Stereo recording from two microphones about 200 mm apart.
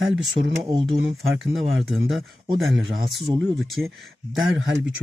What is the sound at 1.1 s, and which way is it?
Speech, centre (ahead or behind).